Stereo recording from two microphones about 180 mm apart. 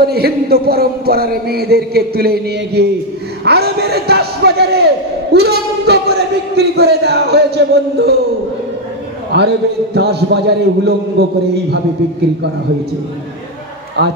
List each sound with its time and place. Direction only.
0.0 s speech: 60° right (ahead or behind)
9.3 s a man's voice: 70° right (ahead or behind)